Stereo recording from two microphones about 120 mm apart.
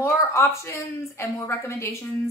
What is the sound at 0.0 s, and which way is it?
A woman's voice, 25° left (ahead or behind).